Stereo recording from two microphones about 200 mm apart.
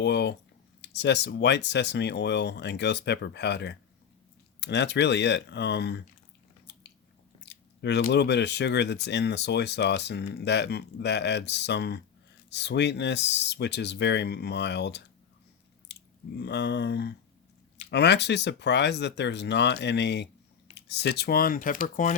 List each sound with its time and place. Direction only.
0.0 s speech: 60° left (ahead or behind)
6.7 s biting: 60° left (ahead or behind)
7.4 s speech: 60° left (ahead or behind); by 22.1 s 40° left (ahead or behind)